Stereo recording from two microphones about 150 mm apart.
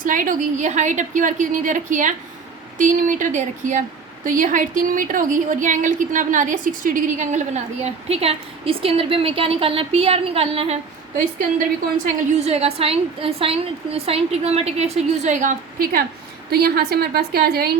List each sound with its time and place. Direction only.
0.0 s a woman's voice: 60° right (ahead or behind); by 10.8 s 40° right (ahead or behind)
12.3 s a woman's voice: 45° right (ahead or behind); by 16.0 s 75° right (ahead or behind)
16.5 s a woman's voice: 90° right